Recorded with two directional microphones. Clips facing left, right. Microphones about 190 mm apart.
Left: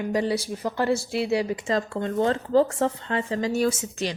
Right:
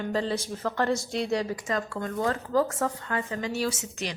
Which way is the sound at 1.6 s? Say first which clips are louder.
Left 4 dB; 25° left (ahead or behind).